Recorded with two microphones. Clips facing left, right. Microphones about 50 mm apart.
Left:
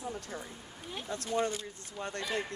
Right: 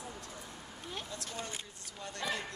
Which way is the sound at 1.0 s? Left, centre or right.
Left.